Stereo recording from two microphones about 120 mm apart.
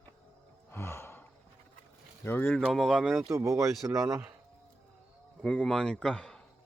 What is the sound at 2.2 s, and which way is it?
Speech, 15° left (ahead or behind).